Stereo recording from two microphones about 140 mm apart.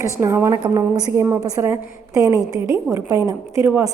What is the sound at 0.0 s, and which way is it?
A woman's voice, 20° right (ahead or behind).